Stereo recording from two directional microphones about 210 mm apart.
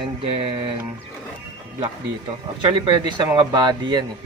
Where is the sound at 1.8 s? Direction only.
20° right (ahead or behind).